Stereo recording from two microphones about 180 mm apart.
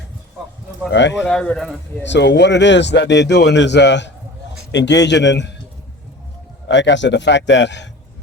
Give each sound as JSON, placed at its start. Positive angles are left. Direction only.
{"t": 0.9, "sound": "a man's voice", "side_deg": 80}
{"t": 1.2, "sound": "speech", "side_deg": 5}
{"t": 2.0, "sound": "speech", "side_deg": 70}
{"t": 6.7, "sound": "a man's voice", "side_deg": 80}